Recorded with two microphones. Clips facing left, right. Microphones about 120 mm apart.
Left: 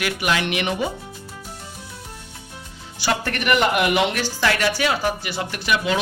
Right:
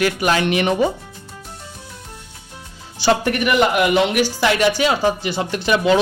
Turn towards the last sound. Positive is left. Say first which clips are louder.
# right 6 dB
turn(degrees=-30)  # may be behind; listen again after turning